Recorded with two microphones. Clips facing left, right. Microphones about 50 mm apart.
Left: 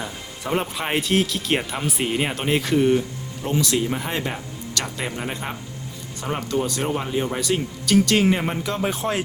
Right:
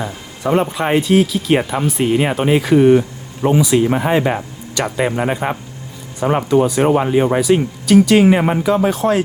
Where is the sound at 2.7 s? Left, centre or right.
Right.